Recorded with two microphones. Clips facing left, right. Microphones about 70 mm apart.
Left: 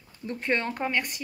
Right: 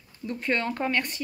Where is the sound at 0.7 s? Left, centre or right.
Centre.